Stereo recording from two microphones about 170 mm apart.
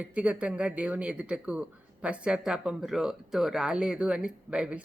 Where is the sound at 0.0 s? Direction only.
5° right (ahead or behind).